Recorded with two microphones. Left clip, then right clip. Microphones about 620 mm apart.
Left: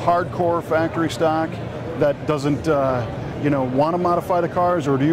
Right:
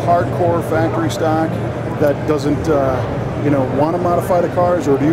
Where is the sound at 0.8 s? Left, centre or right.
Left.